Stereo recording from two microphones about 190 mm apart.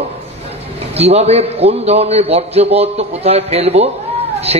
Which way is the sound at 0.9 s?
35° right (ahead or behind).